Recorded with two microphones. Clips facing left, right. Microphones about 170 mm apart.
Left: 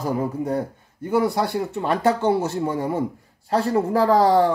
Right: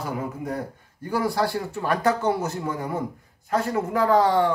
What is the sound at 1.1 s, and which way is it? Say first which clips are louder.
Speech: left 3 dB; 20° left (ahead or behind).